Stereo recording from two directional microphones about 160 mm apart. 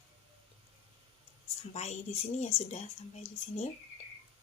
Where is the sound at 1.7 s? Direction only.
45° left (ahead or behind).